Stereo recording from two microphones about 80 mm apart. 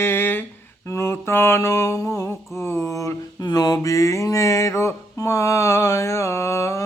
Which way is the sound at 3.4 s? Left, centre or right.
Left.